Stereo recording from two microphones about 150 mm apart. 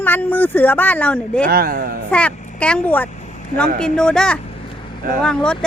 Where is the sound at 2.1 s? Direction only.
10° left (ahead or behind).